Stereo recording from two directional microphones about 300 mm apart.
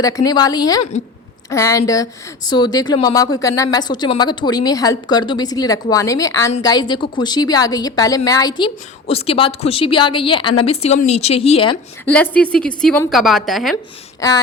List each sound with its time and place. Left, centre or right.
0.0 s a woman's voice: centre
12.0 s a woman's voice: centre
14.2 s a sound: centre